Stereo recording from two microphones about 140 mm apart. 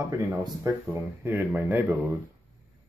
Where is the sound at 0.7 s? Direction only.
20° right (ahead or behind).